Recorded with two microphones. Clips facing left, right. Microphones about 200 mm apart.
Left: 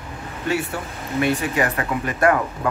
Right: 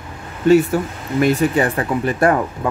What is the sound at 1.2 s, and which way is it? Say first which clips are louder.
Speech: right 6 dB; 30° right (ahead or behind).